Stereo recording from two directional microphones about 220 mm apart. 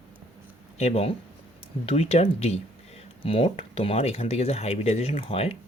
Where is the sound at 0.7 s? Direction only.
30° left (ahead or behind).